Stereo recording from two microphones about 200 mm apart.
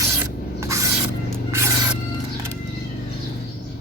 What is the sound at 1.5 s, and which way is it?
Music, 15° right (ahead or behind).